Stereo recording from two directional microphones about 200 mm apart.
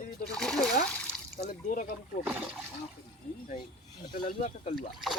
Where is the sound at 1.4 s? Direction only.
40° left (ahead or behind).